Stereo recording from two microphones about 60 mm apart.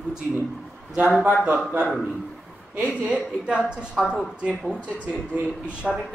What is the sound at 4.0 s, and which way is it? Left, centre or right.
Speech, centre.